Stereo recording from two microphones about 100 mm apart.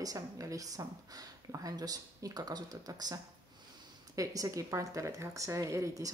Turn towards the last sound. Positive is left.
turn(degrees=-35)  # may be behind; listen again after turning